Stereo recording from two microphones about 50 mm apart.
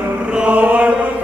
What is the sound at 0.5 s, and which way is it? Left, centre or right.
Chant, right.